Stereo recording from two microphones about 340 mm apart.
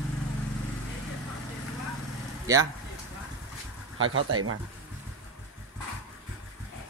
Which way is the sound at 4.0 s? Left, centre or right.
Right.